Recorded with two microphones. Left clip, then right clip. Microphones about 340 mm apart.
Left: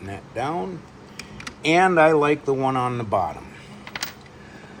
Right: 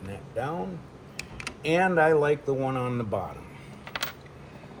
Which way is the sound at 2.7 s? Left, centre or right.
Centre.